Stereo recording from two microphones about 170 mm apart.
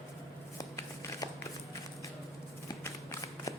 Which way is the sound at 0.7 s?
15° left (ahead or behind).